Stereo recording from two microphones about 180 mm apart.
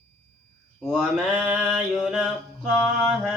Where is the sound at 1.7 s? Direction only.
Centre (ahead or behind).